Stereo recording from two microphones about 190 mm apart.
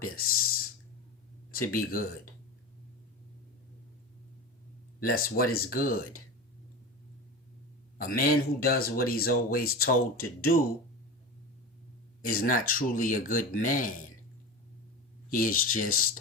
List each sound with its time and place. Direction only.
0.3 s speech: 50° left (ahead or behind)
4.9 s speech: 50° left (ahead or behind)
7.9 s speech: 50° left (ahead or behind)
12.2 s speech: 50° left (ahead or behind)
15.3 s speech: 45° left (ahead or behind)